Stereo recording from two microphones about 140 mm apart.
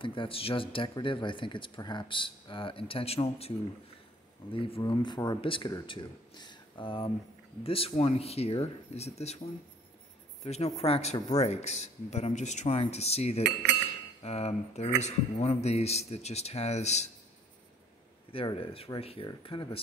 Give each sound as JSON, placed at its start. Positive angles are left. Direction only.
{"t": 0.0, "sound": "speech", "side_deg": 35}
{"t": 10.4, "sound": "speech", "side_deg": 50}
{"t": 18.3, "sound": "speech", "side_deg": 40}